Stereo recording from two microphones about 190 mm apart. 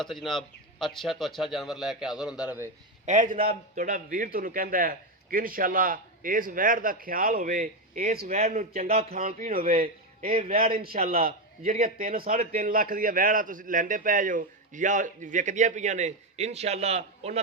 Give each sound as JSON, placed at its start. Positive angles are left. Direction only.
{"t": 0.0, "sound": "speech", "side_deg": 0}
{"t": 3.1, "sound": "a man's voice", "side_deg": -45}
{"t": 8.3, "sound": "speech", "side_deg": -35}
{"t": 9.2, "sound": "a man's voice", "side_deg": -50}
{"t": 10.8, "sound": "a man's voice", "side_deg": -35}